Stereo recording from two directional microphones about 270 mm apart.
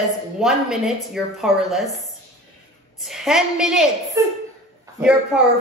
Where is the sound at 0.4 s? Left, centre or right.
Centre.